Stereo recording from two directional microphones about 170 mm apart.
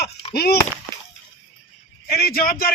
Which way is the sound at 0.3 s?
65° left (ahead or behind).